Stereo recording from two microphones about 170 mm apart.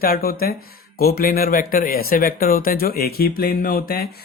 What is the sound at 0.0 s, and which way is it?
Speech, 60° left (ahead or behind).